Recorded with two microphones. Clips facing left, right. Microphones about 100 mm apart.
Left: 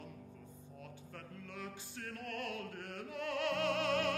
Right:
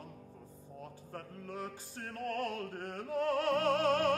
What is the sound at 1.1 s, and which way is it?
Music, 35° right (ahead or behind).